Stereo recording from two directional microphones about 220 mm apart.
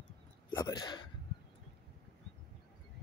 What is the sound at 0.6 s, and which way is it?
Speech, 15° left (ahead or behind).